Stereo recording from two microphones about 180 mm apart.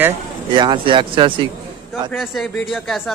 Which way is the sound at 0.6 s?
25° right (ahead or behind).